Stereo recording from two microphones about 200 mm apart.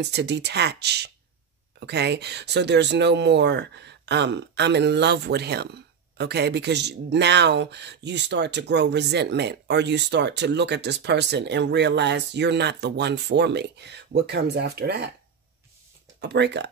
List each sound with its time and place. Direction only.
0.0 s speech: 55° right (ahead or behind)
16.2 s speech: 60° right (ahead or behind)